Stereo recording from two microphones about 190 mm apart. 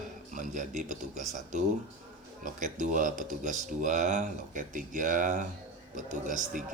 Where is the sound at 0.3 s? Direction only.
40° right (ahead or behind).